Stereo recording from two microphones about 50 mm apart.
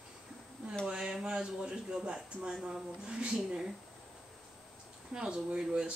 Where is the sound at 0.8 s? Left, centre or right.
Centre.